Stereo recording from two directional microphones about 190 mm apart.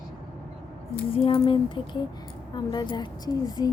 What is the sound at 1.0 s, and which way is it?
Speech, 30° left (ahead or behind).